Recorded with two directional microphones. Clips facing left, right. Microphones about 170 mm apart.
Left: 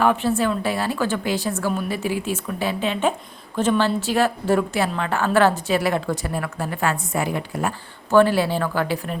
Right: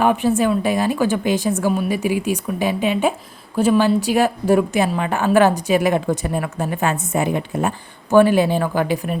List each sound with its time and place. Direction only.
0.0 s a woman's voice: 15° right (ahead or behind)